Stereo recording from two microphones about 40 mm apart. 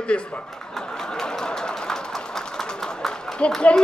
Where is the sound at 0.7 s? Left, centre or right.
Centre.